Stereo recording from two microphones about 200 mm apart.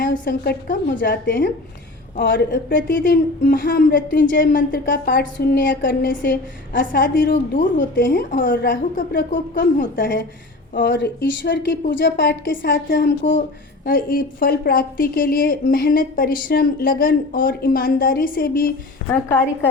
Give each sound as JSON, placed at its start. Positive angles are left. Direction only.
{"t": 0.0, "sound": "a woman's voice", "side_deg": 45}
{"t": 1.0, "sound": "a woman's voice", "side_deg": 60}
{"t": 2.1, "sound": "a woman's voice", "side_deg": 45}
{"t": 7.6, "sound": "a woman's voice", "side_deg": 40}
{"t": 10.8, "sound": "a woman's voice", "side_deg": 60}
{"t": 11.9, "sound": "a woman's voice", "side_deg": 65}
{"t": 13.8, "sound": "a woman's voice", "side_deg": 45}